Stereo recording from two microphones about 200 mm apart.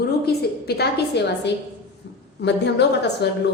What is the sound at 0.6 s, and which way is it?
Speech, 55° left (ahead or behind).